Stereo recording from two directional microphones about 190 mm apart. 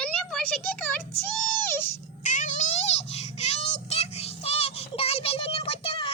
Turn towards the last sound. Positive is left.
turn(degrees=30)  # may be behind; listen again after turning